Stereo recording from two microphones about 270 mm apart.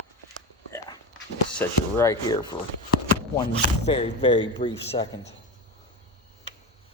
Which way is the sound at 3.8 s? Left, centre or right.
Left.